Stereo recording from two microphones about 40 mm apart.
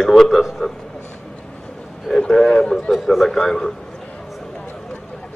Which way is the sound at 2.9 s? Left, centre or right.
Centre.